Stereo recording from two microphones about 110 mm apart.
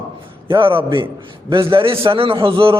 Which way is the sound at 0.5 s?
50° right (ahead or behind).